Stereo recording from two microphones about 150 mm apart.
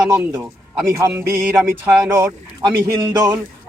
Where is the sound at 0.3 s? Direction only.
20° right (ahead or behind).